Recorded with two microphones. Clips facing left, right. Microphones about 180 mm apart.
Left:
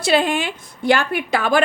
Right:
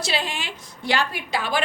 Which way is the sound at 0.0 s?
55° left (ahead or behind).